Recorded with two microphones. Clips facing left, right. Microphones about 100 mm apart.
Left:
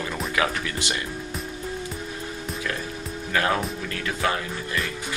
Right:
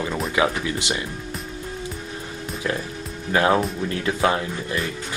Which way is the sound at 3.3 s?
25° right (ahead or behind).